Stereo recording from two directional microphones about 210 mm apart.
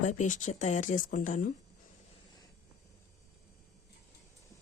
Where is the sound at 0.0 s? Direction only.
35° left (ahead or behind).